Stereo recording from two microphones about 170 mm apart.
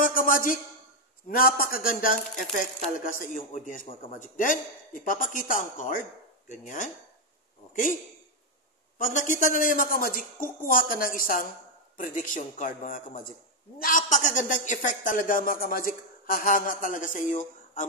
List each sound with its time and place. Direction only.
0.0 s a sound: 55° left (ahead or behind)
1.3 s a man's voice: 55° left (ahead or behind)
8.9 s speech: 50° left (ahead or behind)